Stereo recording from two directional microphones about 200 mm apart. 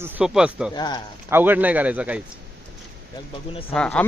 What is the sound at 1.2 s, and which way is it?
Speech, 10° right (ahead or behind).